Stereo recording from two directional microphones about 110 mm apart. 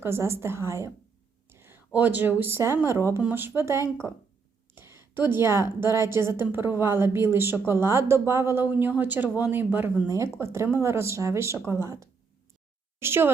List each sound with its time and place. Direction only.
0.0 s speech: 25° right (ahead or behind)
4.7 s a sound: 20° right (ahead or behind)
5.8 s speech: 25° right (ahead or behind)